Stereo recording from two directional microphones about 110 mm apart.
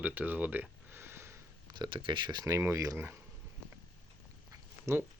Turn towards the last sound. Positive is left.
turn(degrees=-25)  # may be behind; listen again after turning